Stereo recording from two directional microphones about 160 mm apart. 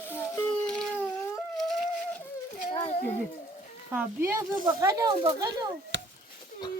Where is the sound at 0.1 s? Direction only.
15° left (ahead or behind).